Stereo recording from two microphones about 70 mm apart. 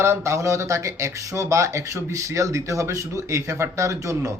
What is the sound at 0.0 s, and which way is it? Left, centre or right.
Speech, right.